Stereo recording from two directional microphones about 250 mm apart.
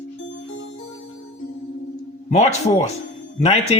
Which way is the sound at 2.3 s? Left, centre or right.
Left.